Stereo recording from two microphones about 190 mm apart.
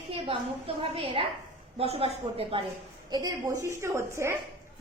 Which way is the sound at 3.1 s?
20° right (ahead or behind).